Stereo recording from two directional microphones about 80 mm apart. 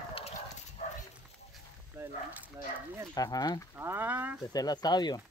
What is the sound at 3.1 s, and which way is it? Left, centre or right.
Speech, left.